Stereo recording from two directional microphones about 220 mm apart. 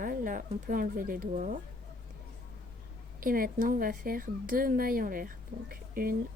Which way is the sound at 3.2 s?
40° right (ahead or behind).